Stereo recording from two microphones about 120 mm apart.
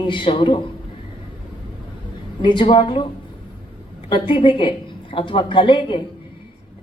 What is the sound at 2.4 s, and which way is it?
Speech, 40° left (ahead or behind).